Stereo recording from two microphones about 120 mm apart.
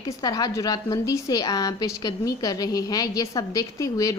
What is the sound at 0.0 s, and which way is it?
A woman's voice, 35° left (ahead or behind).